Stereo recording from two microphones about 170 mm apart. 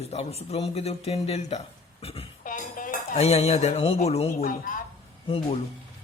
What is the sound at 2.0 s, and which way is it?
Cough, 35° left (ahead or behind).